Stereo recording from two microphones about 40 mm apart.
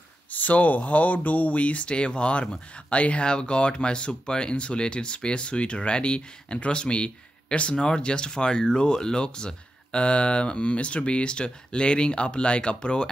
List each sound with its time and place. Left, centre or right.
0.3 s speech: left